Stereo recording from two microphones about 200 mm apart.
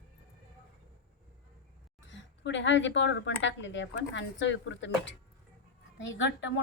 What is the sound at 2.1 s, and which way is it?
A woman's voice, 65° left (ahead or behind).